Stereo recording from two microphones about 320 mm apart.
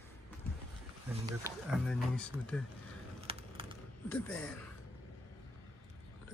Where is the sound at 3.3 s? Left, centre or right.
Centre.